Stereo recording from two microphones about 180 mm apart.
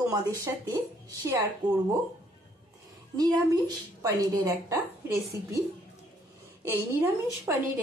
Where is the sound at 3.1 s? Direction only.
20° right (ahead or behind).